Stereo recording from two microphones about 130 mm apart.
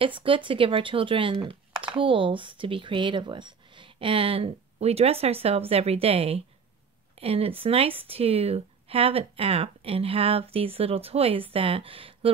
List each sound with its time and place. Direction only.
0.2 s speech: 40° right (ahead or behind)